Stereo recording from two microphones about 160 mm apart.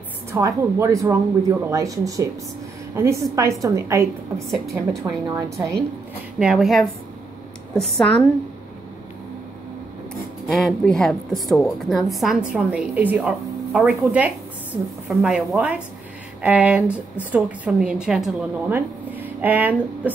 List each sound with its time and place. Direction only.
0.3 s speech: 20° right (ahead or behind)
4.5 s a woman's voice: centre (ahead or behind)
5.0 s speech: 20° right (ahead or behind)
6.4 s a woman's voice: centre (ahead or behind)
10.5 s a woman's voice: centre (ahead or behind)